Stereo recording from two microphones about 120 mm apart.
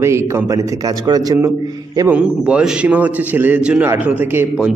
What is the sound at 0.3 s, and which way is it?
A man's voice, 25° right (ahead or behind).